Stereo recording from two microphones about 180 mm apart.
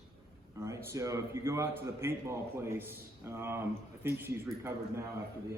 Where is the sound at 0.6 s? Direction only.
15° right (ahead or behind).